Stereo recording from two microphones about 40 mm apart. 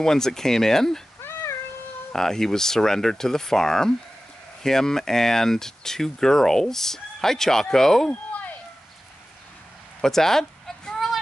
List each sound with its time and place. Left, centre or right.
0.0 s speech: centre
2.1 s speech: centre
8.1 s a sound: left
10.0 s speech: centre